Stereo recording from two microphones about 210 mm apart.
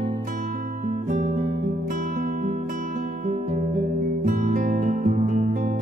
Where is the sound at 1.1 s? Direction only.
40° right (ahead or behind).